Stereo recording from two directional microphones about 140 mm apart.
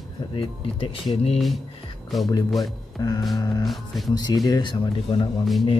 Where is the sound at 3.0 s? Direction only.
30° left (ahead or behind).